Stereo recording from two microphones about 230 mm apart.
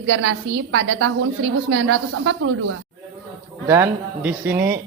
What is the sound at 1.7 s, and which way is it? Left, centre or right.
Speech, right.